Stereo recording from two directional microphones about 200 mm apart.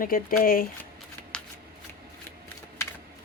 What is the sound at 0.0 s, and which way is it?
Speech, 45° left (ahead or behind).